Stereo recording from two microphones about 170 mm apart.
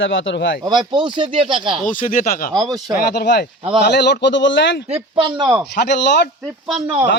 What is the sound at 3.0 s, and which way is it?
Speech, 65° left (ahead or behind).